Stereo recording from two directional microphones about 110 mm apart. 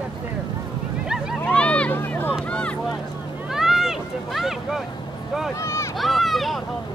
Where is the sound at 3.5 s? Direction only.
5° right (ahead or behind).